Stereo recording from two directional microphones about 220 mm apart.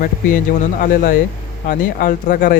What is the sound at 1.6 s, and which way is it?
Speech, 40° left (ahead or behind).